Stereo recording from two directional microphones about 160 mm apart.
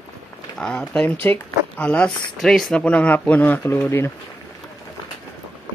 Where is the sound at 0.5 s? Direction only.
5° left (ahead or behind).